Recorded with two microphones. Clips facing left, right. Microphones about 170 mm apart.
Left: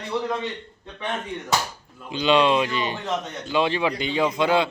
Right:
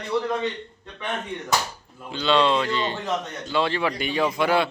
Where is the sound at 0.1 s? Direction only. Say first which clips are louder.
Right 2 dB; 20° left (ahead or behind).